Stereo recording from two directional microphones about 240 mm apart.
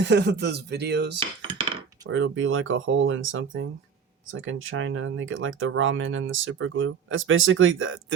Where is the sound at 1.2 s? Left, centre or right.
Right.